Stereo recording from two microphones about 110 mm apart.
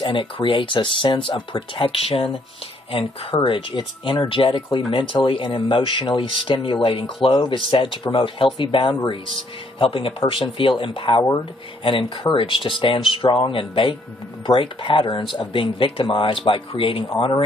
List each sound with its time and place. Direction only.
0.0 s speech: 50° left (ahead or behind)